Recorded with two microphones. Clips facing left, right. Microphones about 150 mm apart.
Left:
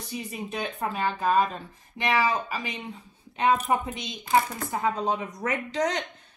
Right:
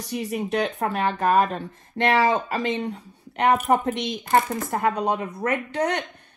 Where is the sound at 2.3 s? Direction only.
90° right.